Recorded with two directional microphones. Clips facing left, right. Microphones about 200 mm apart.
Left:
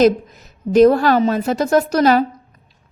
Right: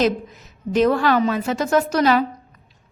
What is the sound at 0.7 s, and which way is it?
A woman's voice, 40° left (ahead or behind).